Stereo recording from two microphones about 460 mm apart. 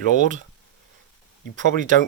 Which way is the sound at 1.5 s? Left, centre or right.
Centre.